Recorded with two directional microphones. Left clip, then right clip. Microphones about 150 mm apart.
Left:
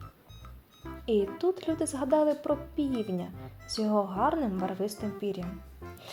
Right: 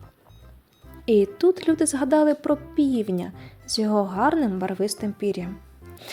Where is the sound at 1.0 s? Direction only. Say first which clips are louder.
Right 9 dB; 35° right (ahead or behind).